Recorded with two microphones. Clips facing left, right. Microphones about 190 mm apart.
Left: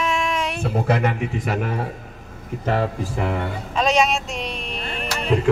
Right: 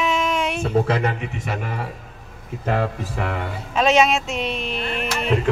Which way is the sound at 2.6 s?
30° left (ahead or behind).